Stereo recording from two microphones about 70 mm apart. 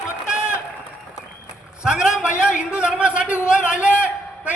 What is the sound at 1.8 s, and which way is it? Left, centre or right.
A man's voice, centre.